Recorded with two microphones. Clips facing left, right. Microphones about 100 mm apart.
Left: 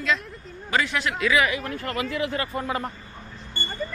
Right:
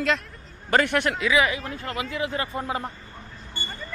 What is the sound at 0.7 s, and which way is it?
Speech, 55° right (ahead or behind).